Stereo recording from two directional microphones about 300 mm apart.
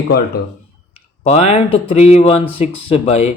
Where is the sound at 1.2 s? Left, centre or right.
Left.